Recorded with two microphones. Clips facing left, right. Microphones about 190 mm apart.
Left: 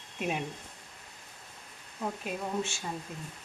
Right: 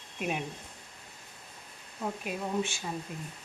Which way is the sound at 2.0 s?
Centre (ahead or behind).